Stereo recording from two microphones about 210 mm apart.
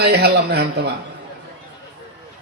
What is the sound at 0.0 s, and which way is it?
Speech, 50° right (ahead or behind).